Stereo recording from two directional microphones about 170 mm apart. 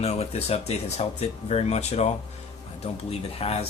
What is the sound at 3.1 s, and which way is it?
Speech, 35° left (ahead or behind).